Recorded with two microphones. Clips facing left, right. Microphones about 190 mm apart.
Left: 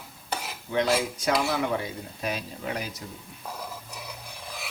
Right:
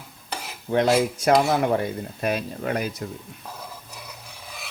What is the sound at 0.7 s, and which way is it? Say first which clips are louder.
Speech: right 5 dB; 55° right (ahead or behind).